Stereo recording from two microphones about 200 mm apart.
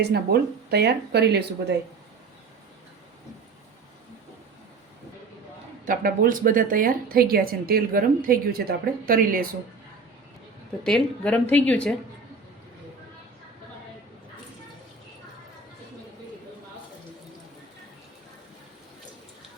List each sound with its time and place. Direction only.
0.0 s speech: 55° right (ahead or behind)
5.8 s a woman's voice: 45° right (ahead or behind)
10.8 s speech: 5° left (ahead or behind)